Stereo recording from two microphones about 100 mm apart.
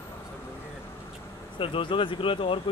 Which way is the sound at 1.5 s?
60° left (ahead or behind).